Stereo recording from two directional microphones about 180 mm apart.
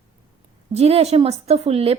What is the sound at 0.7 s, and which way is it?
A woman's voice, 35° right (ahead or behind).